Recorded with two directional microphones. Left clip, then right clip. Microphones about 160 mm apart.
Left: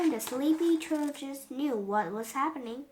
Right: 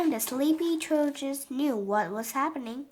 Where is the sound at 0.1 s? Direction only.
40° right (ahead or behind).